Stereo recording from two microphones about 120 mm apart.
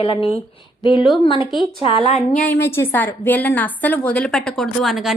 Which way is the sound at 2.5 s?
20° left (ahead or behind).